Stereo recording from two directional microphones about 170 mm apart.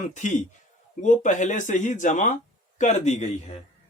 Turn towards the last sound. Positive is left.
turn(degrees=45)  # may be behind; listen again after turning